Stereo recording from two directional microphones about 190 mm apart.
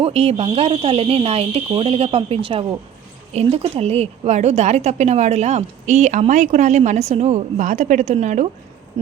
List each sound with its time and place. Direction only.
0.0 s a woman's voice: 30° right (ahead or behind)